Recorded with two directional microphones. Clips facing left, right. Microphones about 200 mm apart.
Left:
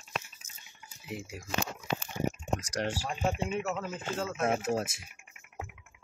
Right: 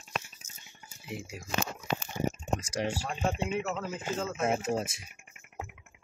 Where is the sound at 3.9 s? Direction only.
10° right (ahead or behind).